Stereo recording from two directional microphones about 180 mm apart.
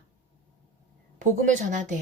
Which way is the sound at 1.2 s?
45° right (ahead or behind).